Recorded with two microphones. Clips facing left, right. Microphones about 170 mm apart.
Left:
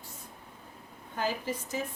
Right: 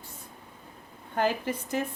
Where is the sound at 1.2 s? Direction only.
60° right (ahead or behind).